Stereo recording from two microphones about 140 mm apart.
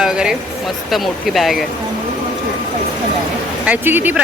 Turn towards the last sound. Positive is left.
turn(degrees=-15)  # may be behind; listen again after turning